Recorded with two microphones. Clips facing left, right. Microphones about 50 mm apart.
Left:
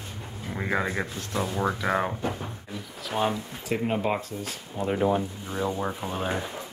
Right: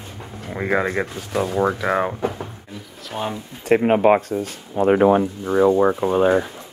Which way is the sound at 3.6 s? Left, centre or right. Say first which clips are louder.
Right 12 dB; right.